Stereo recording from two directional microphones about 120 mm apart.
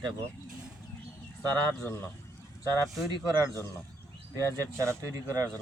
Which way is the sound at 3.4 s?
25° left (ahead or behind).